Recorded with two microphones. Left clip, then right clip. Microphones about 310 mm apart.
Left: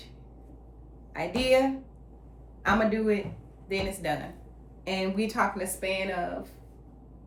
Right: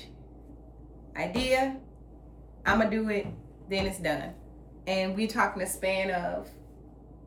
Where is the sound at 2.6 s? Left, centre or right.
Centre.